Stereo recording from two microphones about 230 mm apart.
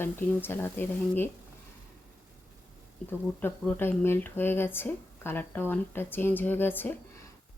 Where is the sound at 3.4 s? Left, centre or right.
Centre.